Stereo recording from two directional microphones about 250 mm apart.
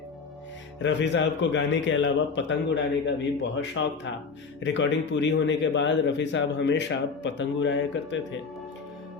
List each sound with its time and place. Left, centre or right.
0.8 s a man's voice: left